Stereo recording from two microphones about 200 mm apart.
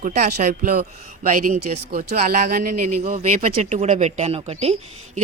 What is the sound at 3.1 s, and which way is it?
Speech, 40° right (ahead or behind).